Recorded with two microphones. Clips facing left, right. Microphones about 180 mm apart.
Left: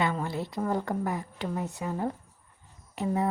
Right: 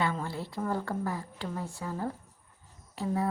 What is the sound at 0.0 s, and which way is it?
Speech, 15° left (ahead or behind).